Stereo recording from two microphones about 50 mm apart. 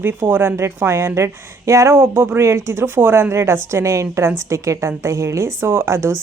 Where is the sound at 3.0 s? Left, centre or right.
Right.